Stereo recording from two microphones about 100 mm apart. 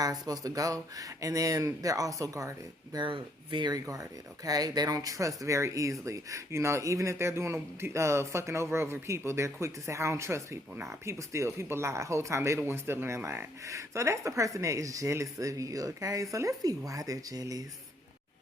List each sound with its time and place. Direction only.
0.0 s speech: 40° right (ahead or behind)
3.0 s speech: 55° right (ahead or behind)
3.7 s speech: 35° right (ahead or behind)